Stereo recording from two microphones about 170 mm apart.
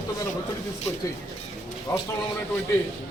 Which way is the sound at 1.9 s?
20° left (ahead or behind).